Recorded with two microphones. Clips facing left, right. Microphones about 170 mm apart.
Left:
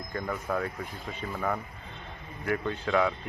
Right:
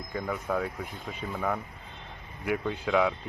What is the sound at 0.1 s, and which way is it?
Speech, 5° right (ahead or behind).